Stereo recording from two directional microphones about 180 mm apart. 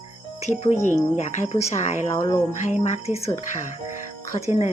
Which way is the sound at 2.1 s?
25° left (ahead or behind).